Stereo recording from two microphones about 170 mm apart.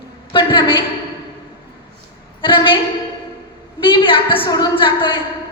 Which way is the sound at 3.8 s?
30° left (ahead or behind).